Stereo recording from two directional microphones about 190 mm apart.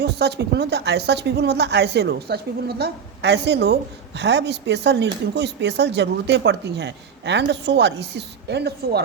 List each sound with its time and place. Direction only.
0.0 s speech: 60° right (ahead or behind)